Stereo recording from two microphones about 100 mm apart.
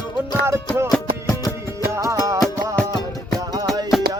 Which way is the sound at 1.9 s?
30° right (ahead or behind).